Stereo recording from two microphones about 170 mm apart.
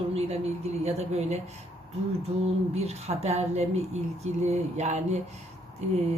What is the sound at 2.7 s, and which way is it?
A woman's voice, 40° right (ahead or behind).